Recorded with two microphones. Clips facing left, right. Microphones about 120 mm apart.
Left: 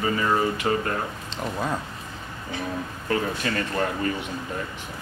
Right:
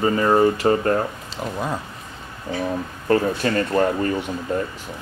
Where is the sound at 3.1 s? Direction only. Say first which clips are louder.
Right 7 dB; 35° right (ahead or behind).